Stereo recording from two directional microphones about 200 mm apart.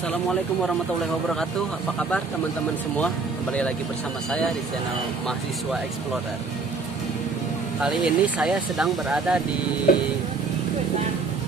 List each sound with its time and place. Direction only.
2.0 s speech: 5° left (ahead or behind)
7.8 s speech: 5° right (ahead or behind)
9.9 s speech: 45° left (ahead or behind)